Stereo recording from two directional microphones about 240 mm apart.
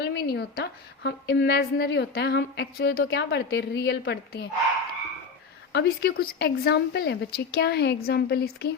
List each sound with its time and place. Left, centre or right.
0.0 s a woman's voice: left
5.7 s speech: left